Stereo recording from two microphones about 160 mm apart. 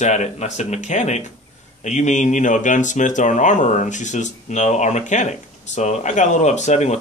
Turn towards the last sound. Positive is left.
turn(degrees=45)  # may be behind; listen again after turning